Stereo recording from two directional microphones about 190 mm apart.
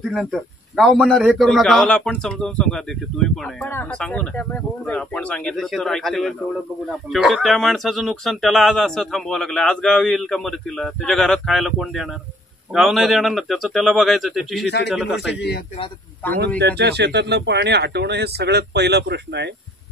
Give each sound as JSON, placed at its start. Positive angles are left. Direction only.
{"t": 0.1, "sound": "speech", "side_deg": 0}
{"t": 15.3, "sound": "a man's voice", "side_deg": 60}
{"t": 16.5, "sound": "speech", "side_deg": -60}